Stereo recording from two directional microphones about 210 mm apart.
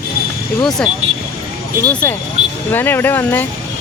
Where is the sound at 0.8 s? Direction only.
5° left (ahead or behind).